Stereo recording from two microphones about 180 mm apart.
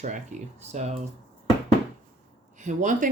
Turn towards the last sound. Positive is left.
turn(degrees=-45)  # may be behind; listen again after turning